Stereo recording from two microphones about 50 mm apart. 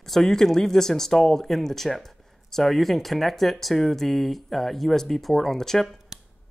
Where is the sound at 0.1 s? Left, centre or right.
Centre.